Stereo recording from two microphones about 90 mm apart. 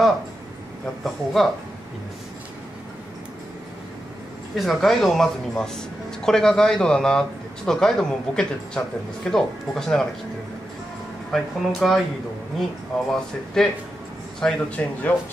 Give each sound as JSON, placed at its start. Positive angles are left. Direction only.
{"t": 1.0, "sound": "speech", "side_deg": 0}
{"t": 4.6, "sound": "a man's voice", "side_deg": 0}
{"t": 11.3, "sound": "a man's voice", "side_deg": 5}